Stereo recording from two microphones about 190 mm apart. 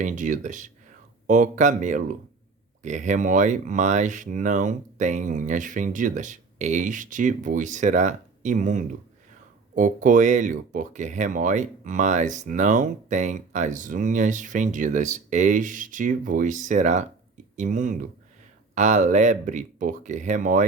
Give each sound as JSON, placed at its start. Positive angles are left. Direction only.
{"t": 0.0, "sound": "speech", "side_deg": -40}